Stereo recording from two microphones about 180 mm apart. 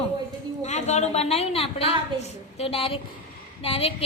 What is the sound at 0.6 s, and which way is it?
A woman's voice, 40° left (ahead or behind).